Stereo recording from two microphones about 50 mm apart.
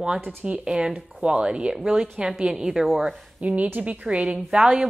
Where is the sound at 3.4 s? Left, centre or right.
Right.